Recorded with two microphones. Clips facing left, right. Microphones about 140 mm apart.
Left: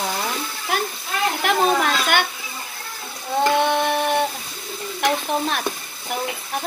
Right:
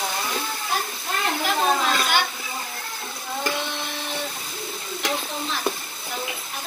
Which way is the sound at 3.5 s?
60° left (ahead or behind).